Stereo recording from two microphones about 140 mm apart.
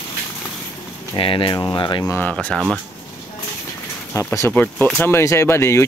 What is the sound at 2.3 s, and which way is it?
Speech, 5° left (ahead or behind).